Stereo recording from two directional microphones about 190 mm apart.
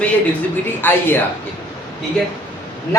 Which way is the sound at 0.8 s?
10° left (ahead or behind).